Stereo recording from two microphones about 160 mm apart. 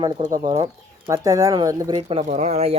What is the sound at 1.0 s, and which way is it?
Speech, 20° right (ahead or behind).